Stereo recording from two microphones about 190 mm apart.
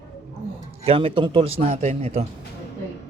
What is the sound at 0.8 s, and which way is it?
A man's voice, 30° right (ahead or behind).